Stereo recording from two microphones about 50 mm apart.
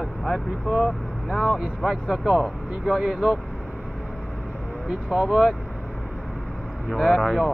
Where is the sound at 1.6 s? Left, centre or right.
Centre.